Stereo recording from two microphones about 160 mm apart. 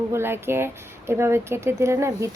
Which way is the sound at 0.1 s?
15° right (ahead or behind).